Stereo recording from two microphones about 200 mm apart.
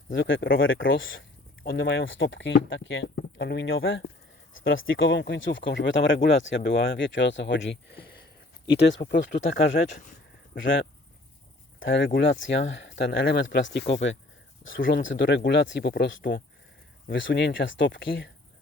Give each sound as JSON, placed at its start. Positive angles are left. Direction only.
{"t": 0.1, "sound": "speech", "side_deg": 70}
{"t": 10.6, "sound": "speech", "side_deg": 70}
{"t": 14.6, "sound": "speech", "side_deg": 75}
{"t": 17.1, "sound": "speech", "side_deg": 60}